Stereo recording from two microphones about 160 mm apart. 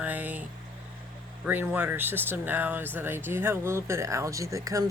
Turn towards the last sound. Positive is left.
turn(degrees=-20)  # may be behind; listen again after turning